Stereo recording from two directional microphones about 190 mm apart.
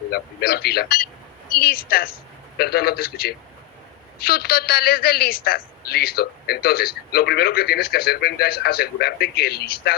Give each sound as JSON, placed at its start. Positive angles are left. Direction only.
{"t": 0.1, "sound": "a man's voice", "side_deg": 55}